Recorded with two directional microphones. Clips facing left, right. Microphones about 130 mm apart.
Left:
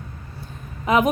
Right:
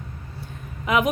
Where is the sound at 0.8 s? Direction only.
35° left (ahead or behind).